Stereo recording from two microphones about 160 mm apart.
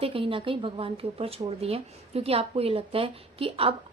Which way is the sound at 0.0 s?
35° right (ahead or behind).